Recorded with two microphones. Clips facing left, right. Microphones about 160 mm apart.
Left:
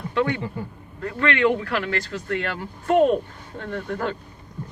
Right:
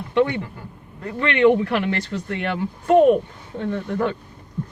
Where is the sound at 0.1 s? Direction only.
20° right (ahead or behind).